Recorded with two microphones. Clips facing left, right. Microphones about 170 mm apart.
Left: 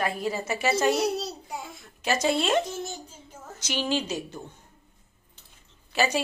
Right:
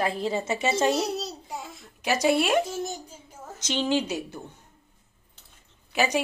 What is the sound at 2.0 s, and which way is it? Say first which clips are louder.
Speech: right 2 dB; 15° right (ahead or behind).